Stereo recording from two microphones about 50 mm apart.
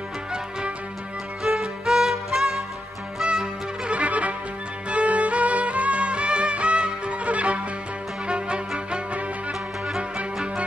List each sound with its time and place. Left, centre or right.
0.3 s music: centre
3.3 s music: centre